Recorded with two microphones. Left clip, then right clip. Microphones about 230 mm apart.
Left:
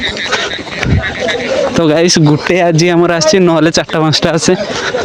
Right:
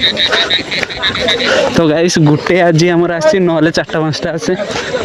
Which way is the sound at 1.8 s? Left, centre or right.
Centre.